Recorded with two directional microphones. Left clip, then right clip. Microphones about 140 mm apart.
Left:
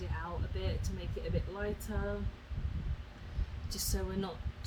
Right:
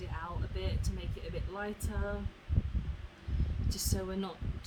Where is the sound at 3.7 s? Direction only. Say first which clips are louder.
Right 1 dB; 15° right (ahead or behind).